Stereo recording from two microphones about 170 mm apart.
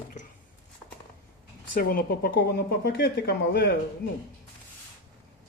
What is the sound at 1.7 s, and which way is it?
A woman's voice, 60° left (ahead or behind).